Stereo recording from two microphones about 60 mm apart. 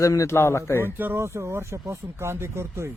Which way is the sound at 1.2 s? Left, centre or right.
Right.